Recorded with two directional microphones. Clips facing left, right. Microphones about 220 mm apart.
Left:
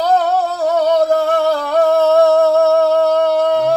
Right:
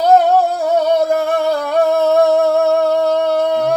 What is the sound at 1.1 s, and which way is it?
Music, 15° right (ahead or behind).